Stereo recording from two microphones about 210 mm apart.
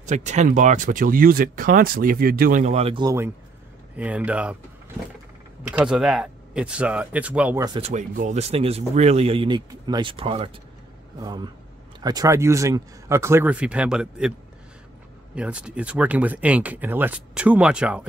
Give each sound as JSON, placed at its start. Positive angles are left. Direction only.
{"t": 0.0, "sound": "speech", "side_deg": -35}
{"t": 3.9, "sound": "speech", "side_deg": -5}
{"t": 7.6, "sound": "speech", "side_deg": -20}
{"t": 7.9, "sound": "speech", "side_deg": -35}
{"t": 15.3, "sound": "speech", "side_deg": -5}